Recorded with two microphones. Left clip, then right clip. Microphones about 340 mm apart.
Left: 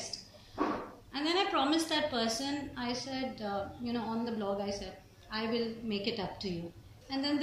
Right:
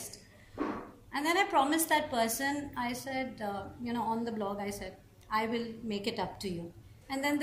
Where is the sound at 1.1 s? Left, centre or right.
Right.